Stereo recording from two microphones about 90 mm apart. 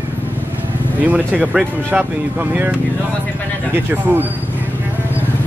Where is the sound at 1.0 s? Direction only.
15° right (ahead or behind).